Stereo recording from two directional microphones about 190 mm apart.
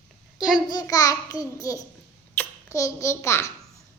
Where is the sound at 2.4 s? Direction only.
15° left (ahead or behind).